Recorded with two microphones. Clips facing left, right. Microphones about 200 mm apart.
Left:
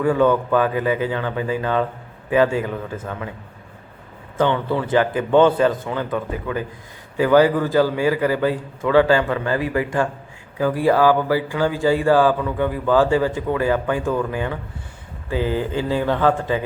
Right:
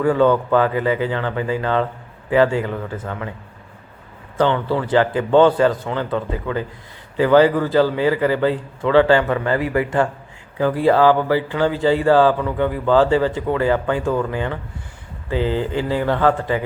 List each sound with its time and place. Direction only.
0.0 s speech: 15° left (ahead or behind)
4.4 s speech: 20° left (ahead or behind)
9.3 s speech: 20° right (ahead or behind)
9.6 s speech: 15° left (ahead or behind)
14.0 s speech: 20° right (ahead or behind)
14.3 s speech: 15° left (ahead or behind)